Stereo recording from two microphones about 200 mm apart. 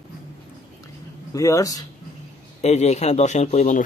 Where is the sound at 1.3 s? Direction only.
15° left (ahead or behind).